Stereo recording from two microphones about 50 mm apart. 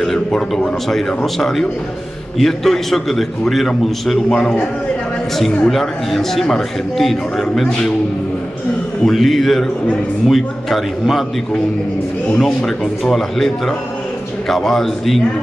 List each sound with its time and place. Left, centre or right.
0.0 s a man's voice: centre
4.3 s speech: centre
5.7 s a man's voice: centre
9.0 s a man's voice: centre
12.4 s speech: centre